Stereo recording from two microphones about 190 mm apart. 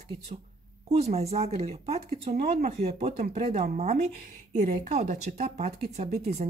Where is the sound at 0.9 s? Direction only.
35° right (ahead or behind).